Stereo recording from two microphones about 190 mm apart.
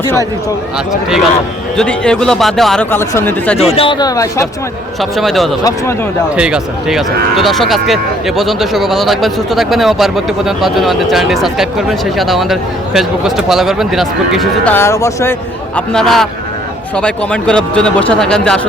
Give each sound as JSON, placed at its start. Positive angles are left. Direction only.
{"t": 1.7, "sound": "speech", "side_deg": 5}
{"t": 3.0, "sound": "speech", "side_deg": 15}
{"t": 3.6, "sound": "speech", "side_deg": 30}
{"t": 4.9, "sound": "speech", "side_deg": 0}